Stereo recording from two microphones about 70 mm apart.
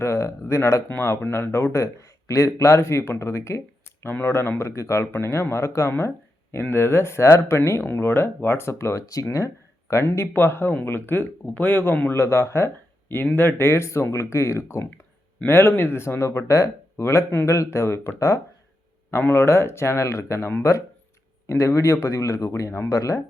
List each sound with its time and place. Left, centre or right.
0.0 s speech: left
4.1 s speech: left
9.9 s speech: left
12.1 s speech: left
19.1 s speech: left